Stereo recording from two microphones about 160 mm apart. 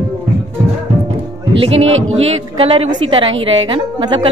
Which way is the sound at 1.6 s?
40° right (ahead or behind).